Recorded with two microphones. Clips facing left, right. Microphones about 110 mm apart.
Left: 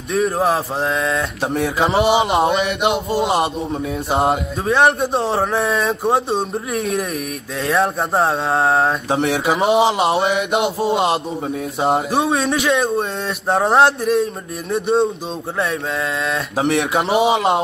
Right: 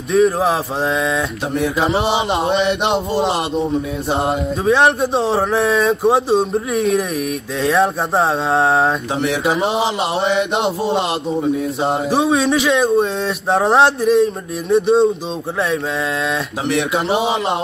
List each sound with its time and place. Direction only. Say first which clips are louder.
0.1 s speech: right 3 dB; centre (ahead or behind)
2.0 s chant: left 3 dB; 30° right (ahead or behind)
4.6 s speech: right 1 dB; centre (ahead or behind)
9.1 s a sound: even; 30° left (ahead or behind)
10.1 s chant: even; 30° right (ahead or behind)
11.1 s a sound: right 2 dB; 30° left (ahead or behind)
12.1 s speech: right 3 dB; centre (ahead or behind)
16.6 s a sound: left 1 dB; 30° left (ahead or behind)
17.1 s chant: left 3 dB; 30° right (ahead or behind)